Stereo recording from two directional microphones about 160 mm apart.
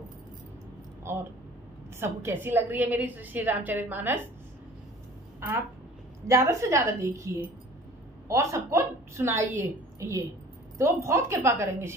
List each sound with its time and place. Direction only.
1.1 s speech: 15° right (ahead or behind)
2.2 s a woman's voice: 15° right (ahead or behind)
6.2 s a woman's voice: 20° right (ahead or behind)